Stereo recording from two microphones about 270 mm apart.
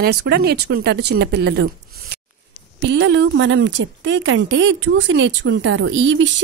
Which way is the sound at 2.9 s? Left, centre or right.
Right.